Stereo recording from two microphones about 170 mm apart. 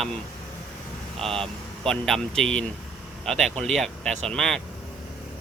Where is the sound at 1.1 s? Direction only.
5° left (ahead or behind).